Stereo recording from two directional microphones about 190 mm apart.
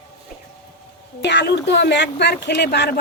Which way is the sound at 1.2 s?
65° left (ahead or behind).